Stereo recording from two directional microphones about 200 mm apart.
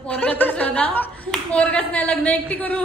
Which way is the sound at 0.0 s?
5° left (ahead or behind).